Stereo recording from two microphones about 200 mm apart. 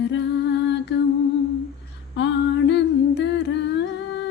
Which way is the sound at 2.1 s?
60° left (ahead or behind).